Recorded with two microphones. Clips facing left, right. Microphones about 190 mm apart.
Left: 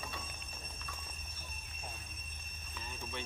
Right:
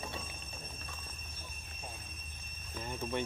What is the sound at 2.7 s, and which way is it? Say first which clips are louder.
Cricket: right 9 dB; 55° right (ahead or behind).